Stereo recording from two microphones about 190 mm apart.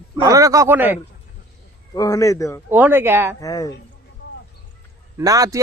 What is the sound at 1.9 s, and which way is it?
Speech, 15° left (ahead or behind).